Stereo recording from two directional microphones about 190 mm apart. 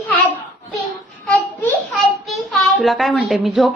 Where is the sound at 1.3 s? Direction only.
5° left (ahead or behind).